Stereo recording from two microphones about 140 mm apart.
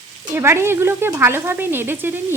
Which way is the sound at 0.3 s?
20° right (ahead or behind).